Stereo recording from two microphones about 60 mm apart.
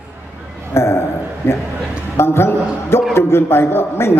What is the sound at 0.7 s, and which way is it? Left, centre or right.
A man's voice, left.